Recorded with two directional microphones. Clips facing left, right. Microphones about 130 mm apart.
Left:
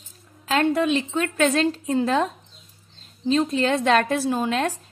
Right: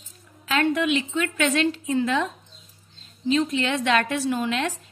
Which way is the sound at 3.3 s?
40° left (ahead or behind).